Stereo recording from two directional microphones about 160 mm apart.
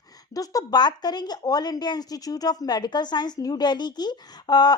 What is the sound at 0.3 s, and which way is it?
Speech, 25° left (ahead or behind).